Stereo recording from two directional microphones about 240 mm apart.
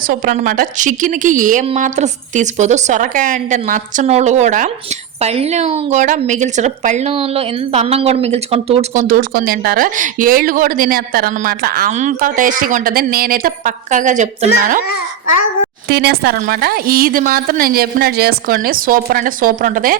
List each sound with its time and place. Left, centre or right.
0.1 s a woman's voice: right
15.9 s a woman's voice: right